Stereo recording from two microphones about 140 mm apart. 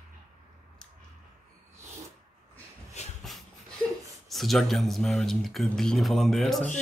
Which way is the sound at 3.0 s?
50° left (ahead or behind).